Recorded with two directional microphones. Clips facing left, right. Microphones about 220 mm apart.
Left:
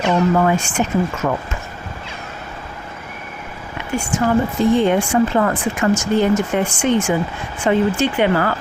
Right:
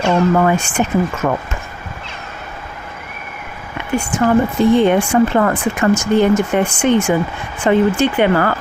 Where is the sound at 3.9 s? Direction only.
60° right (ahead or behind).